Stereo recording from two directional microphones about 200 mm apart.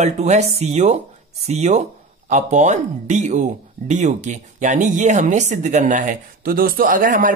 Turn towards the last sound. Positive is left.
turn(degrees=-45)  # may be behind; listen again after turning